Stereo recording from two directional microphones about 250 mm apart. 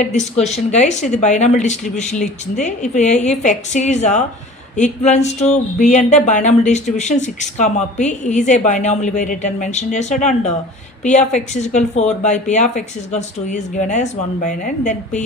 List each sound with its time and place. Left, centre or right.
0.0 s speech: left